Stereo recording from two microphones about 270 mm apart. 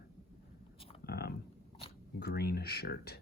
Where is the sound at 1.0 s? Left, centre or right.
Left.